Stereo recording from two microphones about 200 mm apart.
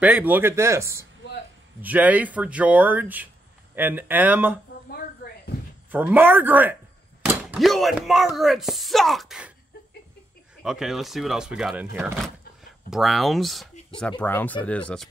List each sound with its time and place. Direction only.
0.0 s speech: 10° right (ahead or behind)
4.9 s a sound: 50° left (ahead or behind)
5.9 s speech: 10° right (ahead or behind)
10.6 s speech: centre (ahead or behind)